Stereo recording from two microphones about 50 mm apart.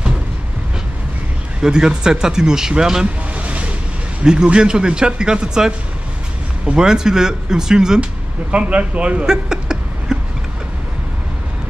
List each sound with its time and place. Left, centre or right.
1.6 s speech: centre
3.3 s a sound: right
4.2 s speech: centre
6.7 s speech: centre
8.0 s speech: right